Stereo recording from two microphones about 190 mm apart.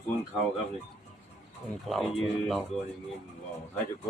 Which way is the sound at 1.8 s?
Centre (ahead or behind).